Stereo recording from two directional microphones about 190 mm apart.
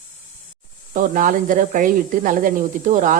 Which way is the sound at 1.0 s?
45° right (ahead or behind).